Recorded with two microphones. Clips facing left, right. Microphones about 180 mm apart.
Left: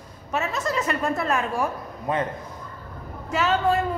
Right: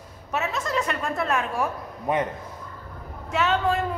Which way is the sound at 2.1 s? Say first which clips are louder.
Right 1 dB; 20° right (ahead or behind).